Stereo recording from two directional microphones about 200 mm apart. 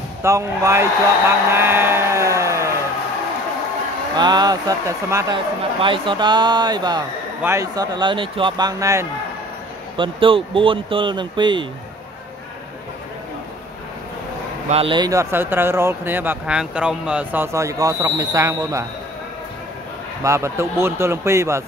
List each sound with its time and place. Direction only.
0.2 s speech: 15° right (ahead or behind)
1.5 s a sound: 10° right (ahead or behind)
4.2 s a man's voice: 20° right (ahead or behind)
14.7 s speech: 25° right (ahead or behind)
20.2 s speech: 15° right (ahead or behind)